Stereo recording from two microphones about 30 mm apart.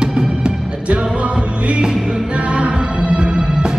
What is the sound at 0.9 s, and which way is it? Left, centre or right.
Music, right.